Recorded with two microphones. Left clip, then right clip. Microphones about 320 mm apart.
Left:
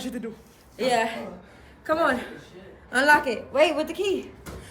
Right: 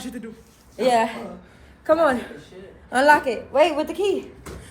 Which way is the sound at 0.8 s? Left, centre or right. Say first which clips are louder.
Right 4 dB; centre.